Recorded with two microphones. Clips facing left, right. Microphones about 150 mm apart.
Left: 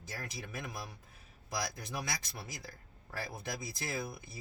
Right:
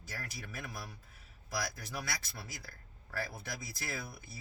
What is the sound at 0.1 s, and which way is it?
Speech, 20° left (ahead or behind).